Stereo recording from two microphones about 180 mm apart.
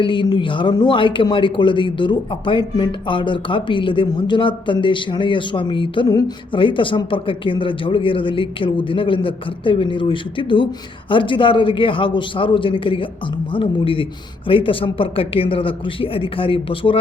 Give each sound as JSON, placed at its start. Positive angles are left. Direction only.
{"t": 0.0, "sound": "speech", "side_deg": 25}